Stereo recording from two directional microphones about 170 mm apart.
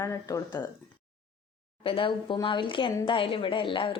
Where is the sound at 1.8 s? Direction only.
30° left (ahead or behind).